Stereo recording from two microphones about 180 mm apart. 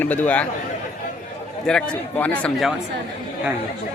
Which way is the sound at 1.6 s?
5° left (ahead or behind).